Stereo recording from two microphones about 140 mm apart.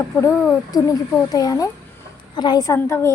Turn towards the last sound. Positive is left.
turn(degrees=15)  # may be behind; listen again after turning